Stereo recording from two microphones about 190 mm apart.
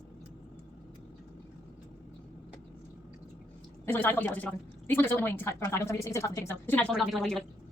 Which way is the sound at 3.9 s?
10° left (ahead or behind).